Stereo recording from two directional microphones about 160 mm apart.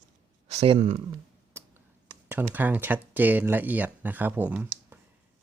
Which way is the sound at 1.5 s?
15° right (ahead or behind).